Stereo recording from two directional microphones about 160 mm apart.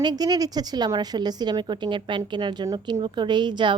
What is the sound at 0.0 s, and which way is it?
Speech, 25° right (ahead or behind).